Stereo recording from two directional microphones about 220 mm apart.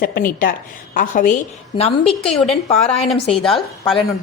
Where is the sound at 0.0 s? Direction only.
40° left (ahead or behind).